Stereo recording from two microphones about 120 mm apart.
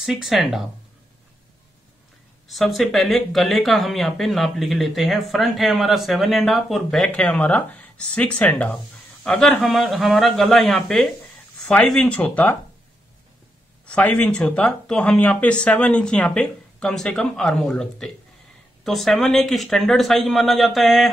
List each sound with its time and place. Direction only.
0.0 s speech: centre (ahead or behind)
2.4 s speech: centre (ahead or behind)
13.8 s speech: 10° left (ahead or behind)